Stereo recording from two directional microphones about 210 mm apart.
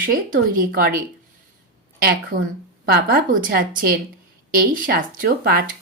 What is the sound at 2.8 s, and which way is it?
Speech, 45° right (ahead or behind).